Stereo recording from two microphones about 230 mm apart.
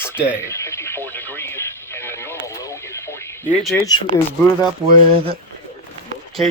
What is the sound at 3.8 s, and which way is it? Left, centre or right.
Speech, centre.